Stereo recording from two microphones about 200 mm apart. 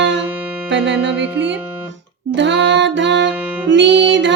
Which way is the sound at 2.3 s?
60° right (ahead or behind).